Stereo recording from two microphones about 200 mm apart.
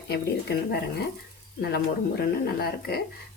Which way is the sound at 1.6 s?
50° left (ahead or behind).